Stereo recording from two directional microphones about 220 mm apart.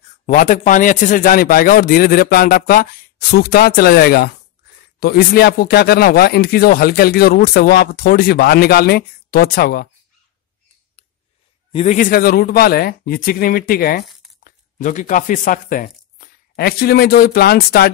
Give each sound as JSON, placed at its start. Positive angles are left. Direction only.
{"t": 0.3, "sound": "a man's voice", "side_deg": 35}
{"t": 11.7, "sound": "speech", "side_deg": 30}